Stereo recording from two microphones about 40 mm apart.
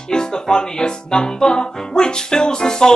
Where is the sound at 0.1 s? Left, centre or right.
Centre.